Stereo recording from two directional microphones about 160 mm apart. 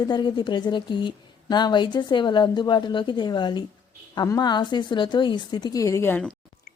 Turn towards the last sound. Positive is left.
turn(degrees=15)  # may be behind; listen again after turning